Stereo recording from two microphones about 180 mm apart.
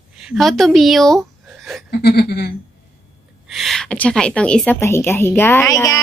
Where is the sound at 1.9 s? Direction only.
60° left (ahead or behind).